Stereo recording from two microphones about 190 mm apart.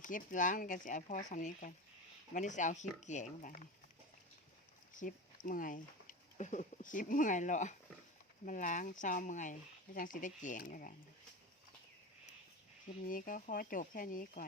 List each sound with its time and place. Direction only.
0.0 s speech: 45° left (ahead or behind)
4.9 s speech: 45° left (ahead or behind)
13.1 s speech: 45° left (ahead or behind)